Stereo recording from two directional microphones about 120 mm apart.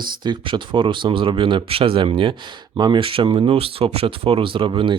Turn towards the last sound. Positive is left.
turn(degrees=-45)  # may be behind; listen again after turning